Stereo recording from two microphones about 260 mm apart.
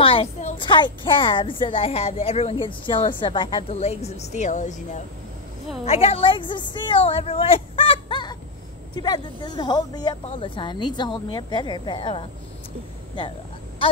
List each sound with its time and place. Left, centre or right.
0.0 s a woman's voice: left